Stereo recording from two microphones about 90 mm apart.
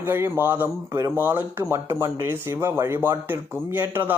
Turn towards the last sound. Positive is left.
turn(degrees=-20)  # may be behind; listen again after turning